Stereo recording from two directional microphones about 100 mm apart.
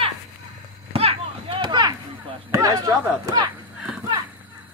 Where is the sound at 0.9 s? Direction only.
75° right (ahead or behind).